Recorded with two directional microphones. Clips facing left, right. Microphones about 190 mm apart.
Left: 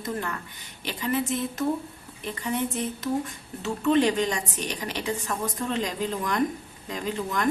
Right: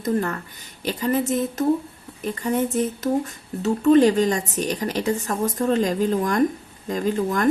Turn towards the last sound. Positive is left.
turn(degrees=-45)  # may be behind; listen again after turning